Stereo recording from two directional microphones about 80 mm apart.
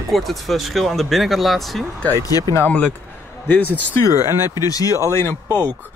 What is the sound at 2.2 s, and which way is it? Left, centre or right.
Speech, left.